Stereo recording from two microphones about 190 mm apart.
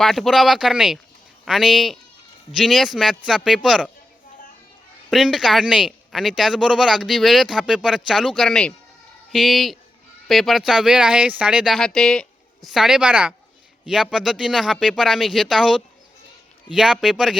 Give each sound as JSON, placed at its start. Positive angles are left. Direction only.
{"t": 0.0, "sound": "speech", "side_deg": 0}
{"t": 5.1, "sound": "speech", "side_deg": 0}